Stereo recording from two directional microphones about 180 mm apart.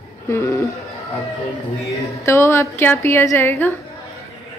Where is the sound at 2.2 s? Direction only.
15° left (ahead or behind).